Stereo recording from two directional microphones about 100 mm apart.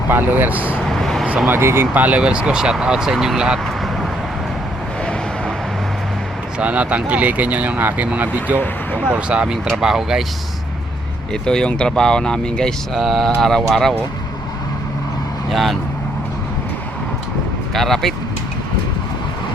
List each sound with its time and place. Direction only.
0.1 s speech: 20° right (ahead or behind)
0.9 s vehicle: 5° left (ahead or behind)
1.5 s speech: 25° right (ahead or behind); by 3.6 s 10° right (ahead or behind)
6.6 s speech: 15° right (ahead or behind)
8.5 s speech: 20° left (ahead or behind)
9.0 s speech: 10° right (ahead or behind)
11.4 s speech: 10° left (ahead or behind)
15.4 s speech: centre (ahead or behind)
17.7 s speech: centre (ahead or behind)